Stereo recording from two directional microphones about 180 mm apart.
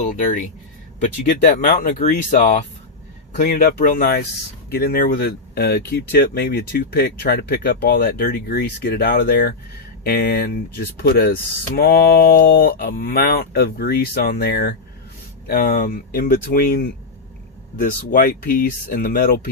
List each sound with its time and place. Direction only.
0.0 s speech: 45° left (ahead or behind)